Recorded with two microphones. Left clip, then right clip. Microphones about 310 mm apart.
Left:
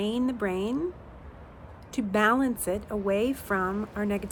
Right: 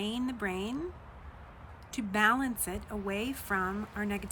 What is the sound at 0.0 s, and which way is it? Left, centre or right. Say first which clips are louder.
Speech: left 6 dB; centre.